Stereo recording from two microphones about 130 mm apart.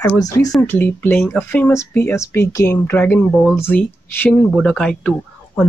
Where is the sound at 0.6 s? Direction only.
15° left (ahead or behind).